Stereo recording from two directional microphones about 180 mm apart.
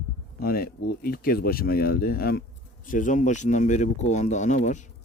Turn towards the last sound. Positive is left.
turn(degrees=45)  # may be behind; listen again after turning